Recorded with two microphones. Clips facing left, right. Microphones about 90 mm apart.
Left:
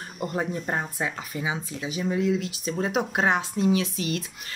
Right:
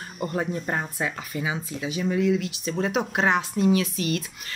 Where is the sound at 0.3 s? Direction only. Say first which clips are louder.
Right 1 dB; 15° left (ahead or behind).